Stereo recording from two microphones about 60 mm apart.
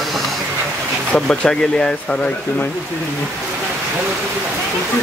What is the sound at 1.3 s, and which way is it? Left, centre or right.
Speech, centre.